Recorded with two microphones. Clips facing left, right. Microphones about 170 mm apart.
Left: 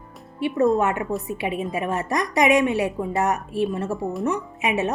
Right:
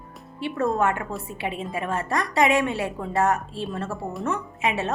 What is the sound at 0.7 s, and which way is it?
A woman's voice, 20° left (ahead or behind).